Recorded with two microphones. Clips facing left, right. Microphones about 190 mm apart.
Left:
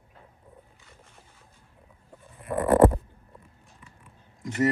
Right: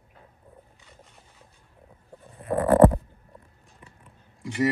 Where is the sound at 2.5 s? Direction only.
30° right (ahead or behind).